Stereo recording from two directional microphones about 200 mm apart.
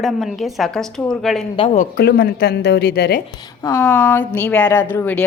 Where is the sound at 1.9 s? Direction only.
55° left (ahead or behind).